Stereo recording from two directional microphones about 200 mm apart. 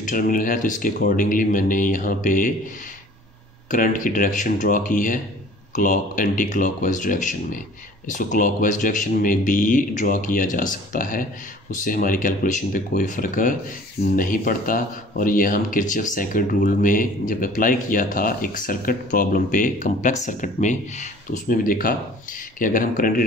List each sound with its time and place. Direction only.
0.0 s speech: 45° left (ahead or behind)
3.7 s speech: 40° left (ahead or behind)